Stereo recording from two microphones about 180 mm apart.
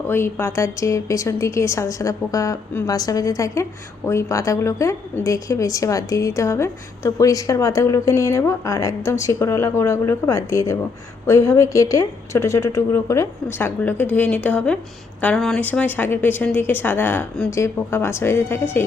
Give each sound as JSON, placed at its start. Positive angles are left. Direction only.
{"t": 0.1, "sound": "a woman's voice", "side_deg": 15}